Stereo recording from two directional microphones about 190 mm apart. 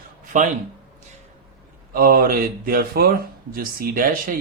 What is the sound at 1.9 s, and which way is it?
Speech, 50° right (ahead or behind).